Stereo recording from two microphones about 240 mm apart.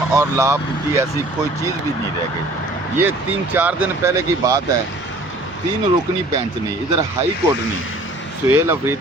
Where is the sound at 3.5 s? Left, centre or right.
Centre.